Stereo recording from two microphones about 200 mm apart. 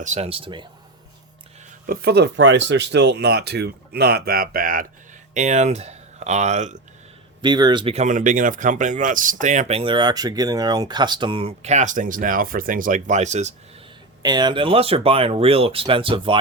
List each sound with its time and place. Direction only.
0.0 s speech: 35° right (ahead or behind)
1.9 s speech: 50° right (ahead or behind); by 6.8 s 35° right (ahead or behind)
7.4 s speech: 20° right (ahead or behind)
14.2 s speech: 20° right (ahead or behind)